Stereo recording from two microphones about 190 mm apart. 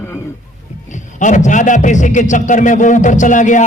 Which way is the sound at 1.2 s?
40° left (ahead or behind).